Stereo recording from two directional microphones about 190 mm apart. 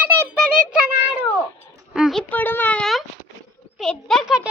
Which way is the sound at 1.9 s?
Centre (ahead or behind).